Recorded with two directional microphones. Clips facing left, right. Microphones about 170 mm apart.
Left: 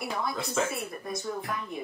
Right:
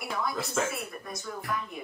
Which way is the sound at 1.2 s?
30° left (ahead or behind).